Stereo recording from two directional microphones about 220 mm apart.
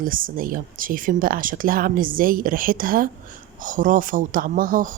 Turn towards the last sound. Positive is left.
turn(degrees=-40)  # may be behind; listen again after turning